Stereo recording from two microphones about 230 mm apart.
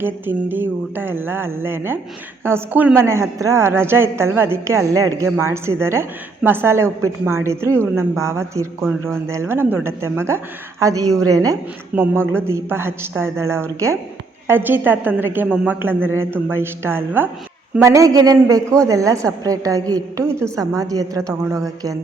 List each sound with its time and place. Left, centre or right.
0.0 s a woman's voice: centre